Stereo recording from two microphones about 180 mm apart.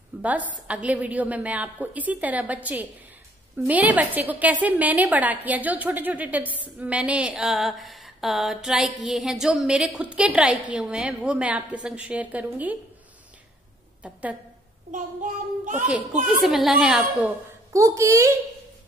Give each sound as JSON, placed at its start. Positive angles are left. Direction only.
{"t": 0.2, "sound": "a woman's voice", "side_deg": -10}
{"t": 15.7, "sound": "a woman's voice", "side_deg": -5}
{"t": 17.7, "sound": "a woman's voice", "side_deg": -15}